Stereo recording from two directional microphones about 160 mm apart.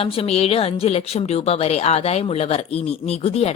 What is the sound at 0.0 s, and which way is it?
A woman's voice, 40° left (ahead or behind).